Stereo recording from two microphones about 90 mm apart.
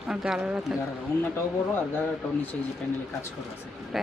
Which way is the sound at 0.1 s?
5° right (ahead or behind).